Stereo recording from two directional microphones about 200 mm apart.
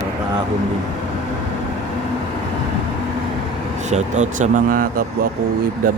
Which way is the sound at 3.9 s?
35° right (ahead or behind).